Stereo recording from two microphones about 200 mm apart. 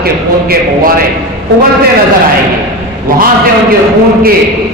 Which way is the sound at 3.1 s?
45° right (ahead or behind).